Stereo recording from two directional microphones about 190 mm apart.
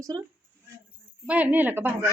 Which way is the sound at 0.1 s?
20° right (ahead or behind).